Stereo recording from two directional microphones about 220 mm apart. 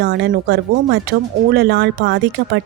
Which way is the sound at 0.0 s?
55° right (ahead or behind).